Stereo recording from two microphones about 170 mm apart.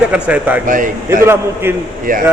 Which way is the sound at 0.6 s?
50° right (ahead or behind).